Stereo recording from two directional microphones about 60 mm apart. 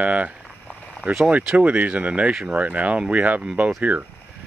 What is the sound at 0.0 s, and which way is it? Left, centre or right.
Speech, right.